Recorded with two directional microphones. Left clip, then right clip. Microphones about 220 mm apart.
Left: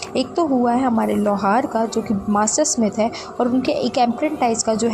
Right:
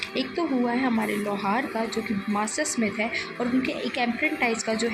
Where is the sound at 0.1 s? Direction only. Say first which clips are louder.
Left 12 dB; 30° left (ahead or behind).